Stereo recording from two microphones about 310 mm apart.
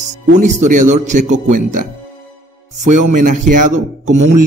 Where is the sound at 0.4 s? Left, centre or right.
Right.